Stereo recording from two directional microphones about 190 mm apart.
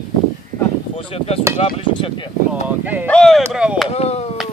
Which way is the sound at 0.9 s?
30° left (ahead or behind).